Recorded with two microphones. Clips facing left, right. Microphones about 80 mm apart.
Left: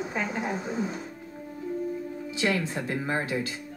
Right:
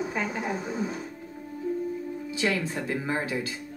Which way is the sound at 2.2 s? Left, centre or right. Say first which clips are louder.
Left 1 dB; left.